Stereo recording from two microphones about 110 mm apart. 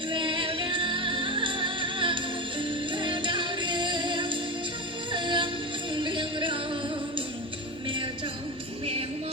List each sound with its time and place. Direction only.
0.1 s music: 50° right (ahead or behind)